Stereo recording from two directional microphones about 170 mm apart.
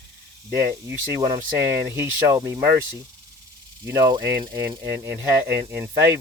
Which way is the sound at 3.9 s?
20° right (ahead or behind).